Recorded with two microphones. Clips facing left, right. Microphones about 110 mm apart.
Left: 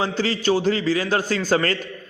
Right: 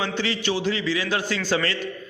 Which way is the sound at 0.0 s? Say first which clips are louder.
Left 4 dB; 40° left (ahead or behind).